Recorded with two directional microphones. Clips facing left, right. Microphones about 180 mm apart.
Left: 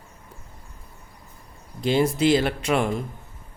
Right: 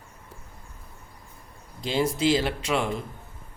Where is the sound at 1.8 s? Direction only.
55° left (ahead or behind).